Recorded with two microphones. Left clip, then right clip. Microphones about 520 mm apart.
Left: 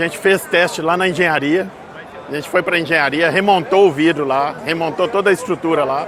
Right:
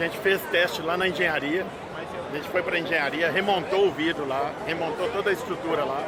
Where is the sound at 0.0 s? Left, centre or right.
Left.